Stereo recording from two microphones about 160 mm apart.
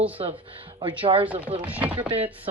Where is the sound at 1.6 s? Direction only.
10° right (ahead or behind).